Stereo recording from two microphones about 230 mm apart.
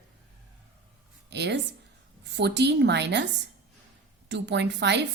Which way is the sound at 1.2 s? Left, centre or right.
Right.